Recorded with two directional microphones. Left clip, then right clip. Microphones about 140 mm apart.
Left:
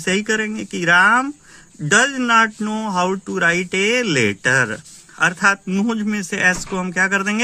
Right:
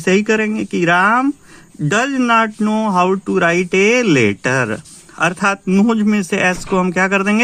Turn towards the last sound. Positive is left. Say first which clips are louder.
# right 3 dB
turn(degrees=-35)  # may be behind; listen again after turning